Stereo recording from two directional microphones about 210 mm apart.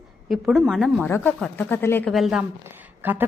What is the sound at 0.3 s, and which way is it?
A woman's voice, centre (ahead or behind).